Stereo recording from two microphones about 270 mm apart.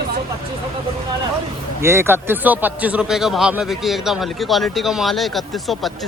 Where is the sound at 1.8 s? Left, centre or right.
Centre.